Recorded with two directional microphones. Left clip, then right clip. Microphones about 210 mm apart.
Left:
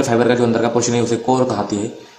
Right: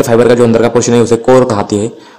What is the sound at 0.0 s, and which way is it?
A man's voice, 55° right (ahead or behind).